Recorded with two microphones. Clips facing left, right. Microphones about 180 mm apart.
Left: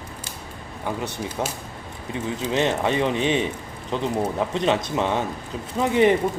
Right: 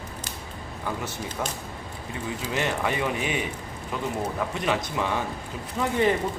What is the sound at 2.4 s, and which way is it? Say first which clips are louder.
Speech: left 5 dB; 20° left (ahead or behind).